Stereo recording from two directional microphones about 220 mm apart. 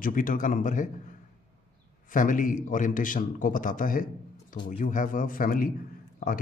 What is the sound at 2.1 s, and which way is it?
Speech, 35° left (ahead or behind).